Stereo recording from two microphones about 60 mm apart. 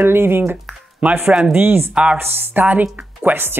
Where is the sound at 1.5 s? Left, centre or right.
Right.